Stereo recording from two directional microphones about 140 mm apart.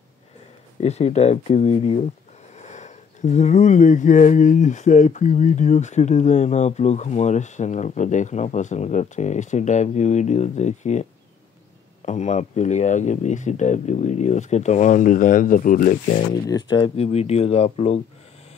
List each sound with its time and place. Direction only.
0.7 s speech: 50° left (ahead or behind); by 16.3 s 70° left (ahead or behind)
16.4 s speech: 30° left (ahead or behind)
16.9 s speech: 45° left (ahead or behind)